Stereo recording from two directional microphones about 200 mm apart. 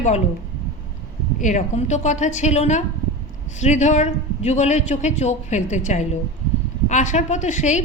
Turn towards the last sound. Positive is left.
turn(degrees=35)  # may be behind; listen again after turning